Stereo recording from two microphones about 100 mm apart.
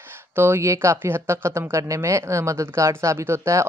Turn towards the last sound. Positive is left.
turn(degrees=-30)  # may be behind; listen again after turning